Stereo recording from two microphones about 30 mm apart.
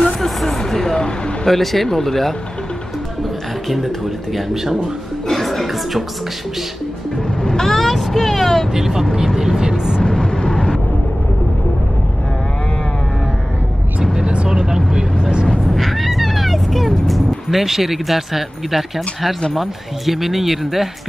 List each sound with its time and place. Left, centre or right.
0.2 s a sound: centre
0.9 s a sound: left
1.4 s speech: centre
3.6 s speech: centre
5.3 s chuckle: centre
7.6 s vehicle: centre
9.1 s vehicle: centre
10.0 s vehicle: left
15.6 s music: centre
17.5 s speech: centre